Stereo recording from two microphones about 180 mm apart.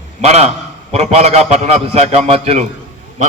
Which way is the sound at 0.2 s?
35° right (ahead or behind).